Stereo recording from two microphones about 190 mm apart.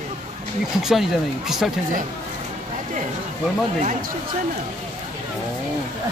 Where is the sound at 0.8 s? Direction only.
Centre (ahead or behind).